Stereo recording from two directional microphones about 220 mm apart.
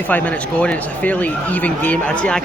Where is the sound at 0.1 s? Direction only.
5° left (ahead or behind).